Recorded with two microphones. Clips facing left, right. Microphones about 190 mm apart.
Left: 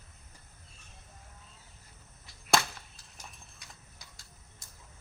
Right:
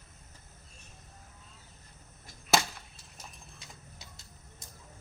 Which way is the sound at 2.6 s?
20° right (ahead or behind).